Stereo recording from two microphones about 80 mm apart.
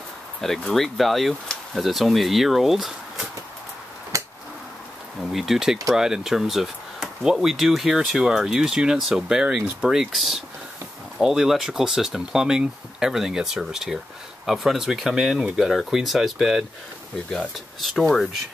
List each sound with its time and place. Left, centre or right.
0.4 s speech: centre
4.1 s a sound: right
5.3 s speech: centre